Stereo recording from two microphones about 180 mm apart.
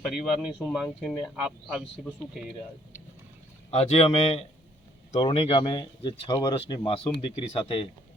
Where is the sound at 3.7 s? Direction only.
35° left (ahead or behind).